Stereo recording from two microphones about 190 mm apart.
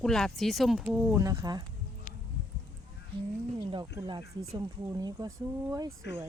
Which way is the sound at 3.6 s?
20° right (ahead or behind).